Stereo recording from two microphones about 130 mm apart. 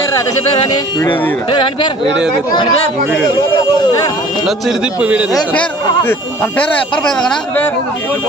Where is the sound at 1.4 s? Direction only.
40° left (ahead or behind).